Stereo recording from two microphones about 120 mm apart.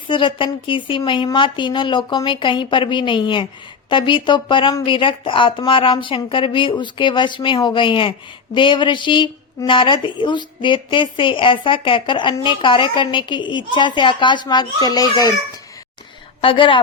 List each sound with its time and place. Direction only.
0.1 s a woman's voice: 45° left (ahead or behind)
16.4 s speech: 45° left (ahead or behind)